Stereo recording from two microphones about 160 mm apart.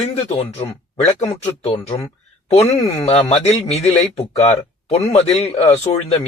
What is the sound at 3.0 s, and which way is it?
Speech, 40° left (ahead or behind).